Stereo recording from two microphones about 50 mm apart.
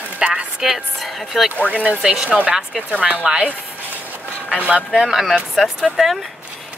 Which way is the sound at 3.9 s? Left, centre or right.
Right.